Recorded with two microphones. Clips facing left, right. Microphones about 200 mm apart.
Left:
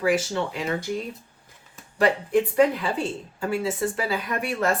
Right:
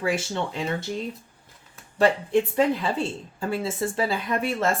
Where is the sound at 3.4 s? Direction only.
30° right (ahead or behind).